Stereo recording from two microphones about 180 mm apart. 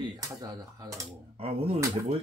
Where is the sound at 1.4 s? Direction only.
35° right (ahead or behind).